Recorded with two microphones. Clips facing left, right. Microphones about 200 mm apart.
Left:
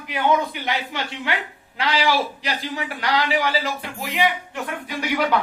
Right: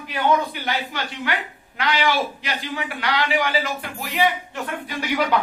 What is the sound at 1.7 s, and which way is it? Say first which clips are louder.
A man's voice: left 1 dB; 35° left (ahead or behind).